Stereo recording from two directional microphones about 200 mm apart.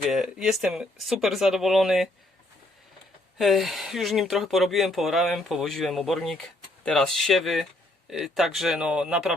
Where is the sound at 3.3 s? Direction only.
Centre (ahead or behind).